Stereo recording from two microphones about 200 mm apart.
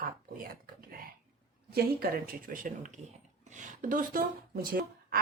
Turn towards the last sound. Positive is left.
turn(degrees=-50)  # may be behind; listen again after turning